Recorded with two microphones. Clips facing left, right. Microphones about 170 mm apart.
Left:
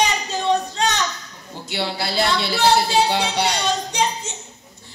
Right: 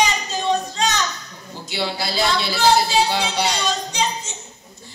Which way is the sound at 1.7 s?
60° left (ahead or behind).